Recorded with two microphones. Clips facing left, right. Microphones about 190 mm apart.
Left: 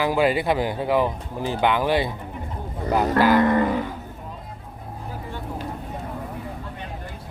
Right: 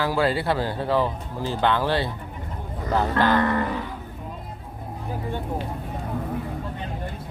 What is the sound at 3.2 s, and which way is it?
Speech, 10° left (ahead or behind).